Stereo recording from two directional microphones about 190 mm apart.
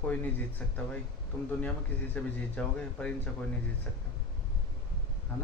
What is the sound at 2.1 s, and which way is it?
Speech, 5° left (ahead or behind).